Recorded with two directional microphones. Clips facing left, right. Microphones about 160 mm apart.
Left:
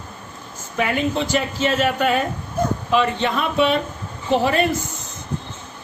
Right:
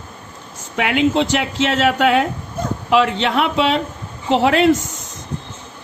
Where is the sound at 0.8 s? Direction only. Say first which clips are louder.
Right 5 dB; 80° right.